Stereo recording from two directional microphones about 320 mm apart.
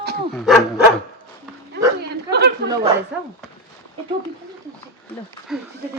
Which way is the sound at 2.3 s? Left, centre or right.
Right.